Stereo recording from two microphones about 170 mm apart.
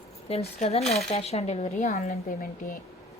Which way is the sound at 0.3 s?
35° left (ahead or behind).